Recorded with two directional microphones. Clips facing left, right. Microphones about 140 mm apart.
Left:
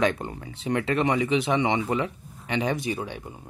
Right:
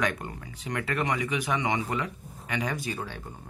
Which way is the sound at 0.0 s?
25° left (ahead or behind).